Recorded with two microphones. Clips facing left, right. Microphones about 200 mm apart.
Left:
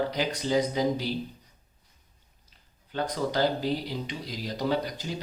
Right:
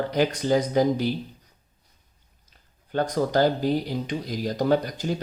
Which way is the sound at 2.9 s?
50° right (ahead or behind).